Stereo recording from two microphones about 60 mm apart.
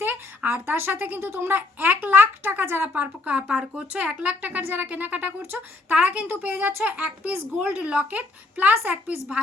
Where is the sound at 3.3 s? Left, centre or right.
Centre.